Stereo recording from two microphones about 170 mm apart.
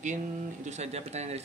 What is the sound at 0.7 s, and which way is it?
Speech, 40° right (ahead or behind).